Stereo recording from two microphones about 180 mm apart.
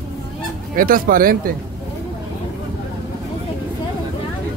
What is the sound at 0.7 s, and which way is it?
Speech, 50° right (ahead or behind).